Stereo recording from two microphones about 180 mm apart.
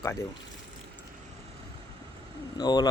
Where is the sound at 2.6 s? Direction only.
25° left (ahead or behind).